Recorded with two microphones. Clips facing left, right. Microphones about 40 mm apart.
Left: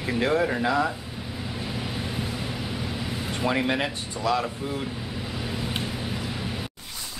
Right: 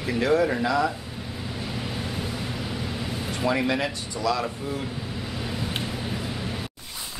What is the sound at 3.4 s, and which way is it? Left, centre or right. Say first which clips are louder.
Speech: right 1 dB; centre.